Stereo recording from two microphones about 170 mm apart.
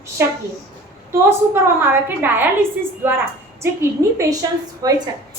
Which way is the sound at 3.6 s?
15° right (ahead or behind).